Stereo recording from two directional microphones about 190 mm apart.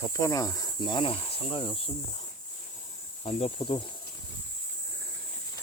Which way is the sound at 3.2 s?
30° left (ahead or behind).